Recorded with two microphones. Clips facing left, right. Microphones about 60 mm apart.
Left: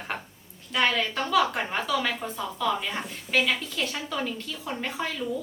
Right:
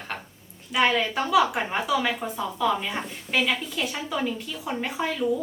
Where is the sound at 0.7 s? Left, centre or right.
Centre.